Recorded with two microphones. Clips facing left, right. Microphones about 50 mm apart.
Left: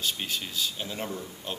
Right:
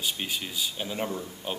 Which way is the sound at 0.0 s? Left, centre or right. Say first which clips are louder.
Even; centre.